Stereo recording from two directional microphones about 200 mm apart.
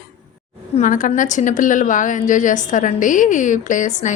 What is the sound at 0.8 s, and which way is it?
A woman's voice, 40° left (ahead or behind).